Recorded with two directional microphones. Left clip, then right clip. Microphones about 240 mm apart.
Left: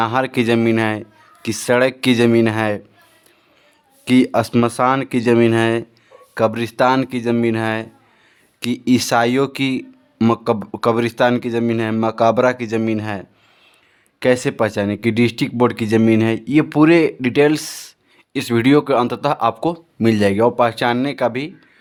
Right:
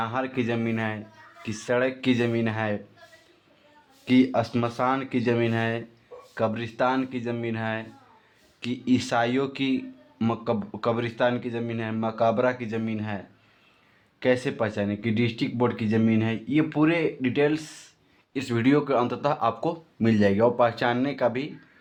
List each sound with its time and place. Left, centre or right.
0.0 s speech: left
4.0 s speech: left